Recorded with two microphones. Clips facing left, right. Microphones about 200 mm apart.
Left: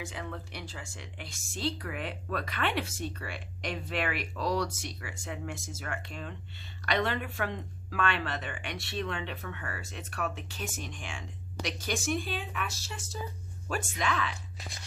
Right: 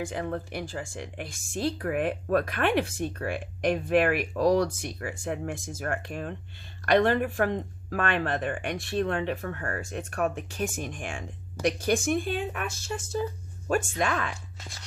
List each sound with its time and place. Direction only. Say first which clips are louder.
0.0 s speech: right 8 dB; 50° right (ahead or behind)